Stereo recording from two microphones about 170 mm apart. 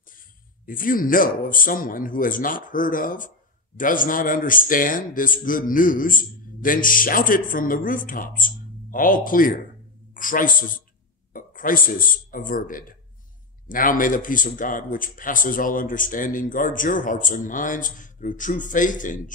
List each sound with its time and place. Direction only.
0.7 s a man's voice: 55° left (ahead or behind)